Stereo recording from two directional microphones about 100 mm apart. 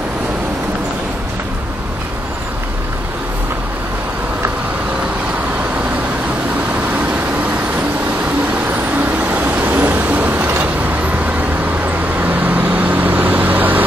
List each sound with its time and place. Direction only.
6.7 s vehicle: 15° right (ahead or behind)
8.6 s vehicle: 20° right (ahead or behind)
12.2 s vehicle: 15° right (ahead or behind)